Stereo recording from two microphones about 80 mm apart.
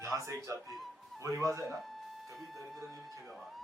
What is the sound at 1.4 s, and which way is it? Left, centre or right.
Speech, right.